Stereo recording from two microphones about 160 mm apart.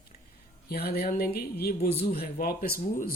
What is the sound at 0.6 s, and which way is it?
Speech, 75° left (ahead or behind).